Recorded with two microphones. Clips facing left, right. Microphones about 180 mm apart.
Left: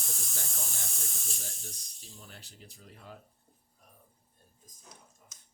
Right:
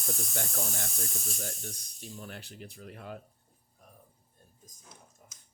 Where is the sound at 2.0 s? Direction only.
65° right (ahead or behind).